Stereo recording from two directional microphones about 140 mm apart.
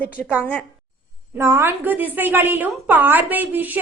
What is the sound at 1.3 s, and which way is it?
A woman's voice, 20° right (ahead or behind).